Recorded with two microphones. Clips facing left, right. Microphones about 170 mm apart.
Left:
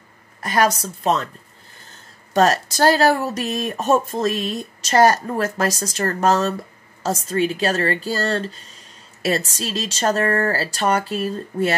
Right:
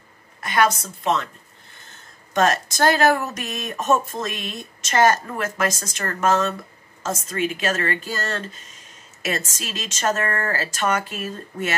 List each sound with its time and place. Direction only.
0.4 s a woman's voice: 40° left (ahead or behind)